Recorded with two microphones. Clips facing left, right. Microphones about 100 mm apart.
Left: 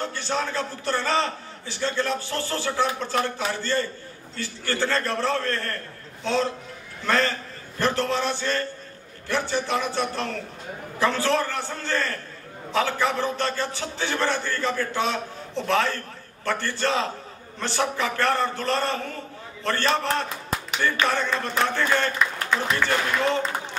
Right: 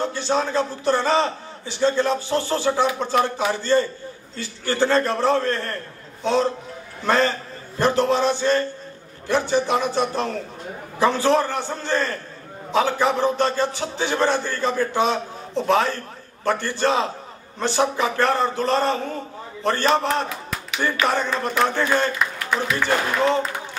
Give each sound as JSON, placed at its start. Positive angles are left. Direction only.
{"t": 0.0, "sound": "a man's voice", "side_deg": -20}